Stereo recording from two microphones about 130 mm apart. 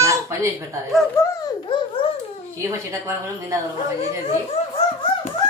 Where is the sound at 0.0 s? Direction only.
25° right (ahead or behind).